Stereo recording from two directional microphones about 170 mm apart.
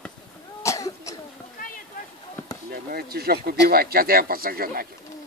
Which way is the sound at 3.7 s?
60° right (ahead or behind).